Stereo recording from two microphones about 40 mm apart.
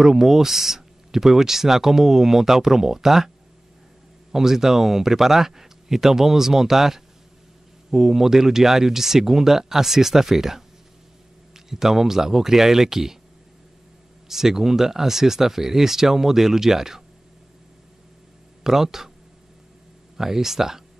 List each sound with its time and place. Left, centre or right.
0.0 s speech: centre
4.3 s speech: centre
14.3 s speech: centre
18.6 s speech: centre
20.2 s speech: centre